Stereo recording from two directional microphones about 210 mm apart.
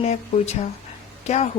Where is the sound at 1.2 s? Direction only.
30° left (ahead or behind).